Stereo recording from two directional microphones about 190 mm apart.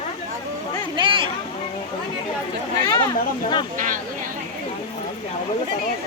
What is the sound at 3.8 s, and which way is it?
Speech, 45° right (ahead or behind).